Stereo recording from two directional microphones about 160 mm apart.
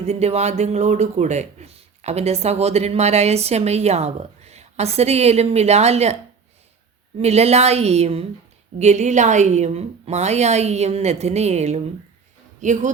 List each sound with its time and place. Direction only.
0.0 s speech: 40° right (ahead or behind)
7.2 s a woman's voice: 40° right (ahead or behind)